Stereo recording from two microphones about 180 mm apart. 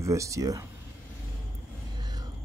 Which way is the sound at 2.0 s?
20° right (ahead or behind).